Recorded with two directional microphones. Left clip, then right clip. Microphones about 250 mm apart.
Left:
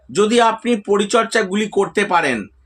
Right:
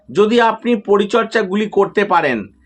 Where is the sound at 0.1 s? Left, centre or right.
Centre.